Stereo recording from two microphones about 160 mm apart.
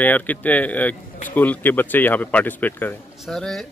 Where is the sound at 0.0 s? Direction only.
10° left (ahead or behind).